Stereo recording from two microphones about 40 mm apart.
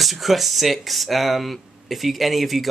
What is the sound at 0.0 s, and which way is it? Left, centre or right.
Speech, centre.